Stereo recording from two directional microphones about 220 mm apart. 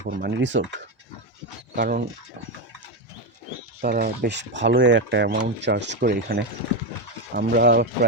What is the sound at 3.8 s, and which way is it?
Speech, 45° right (ahead or behind).